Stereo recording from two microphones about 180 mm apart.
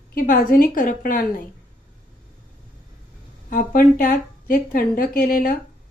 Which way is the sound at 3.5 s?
50° left (ahead or behind).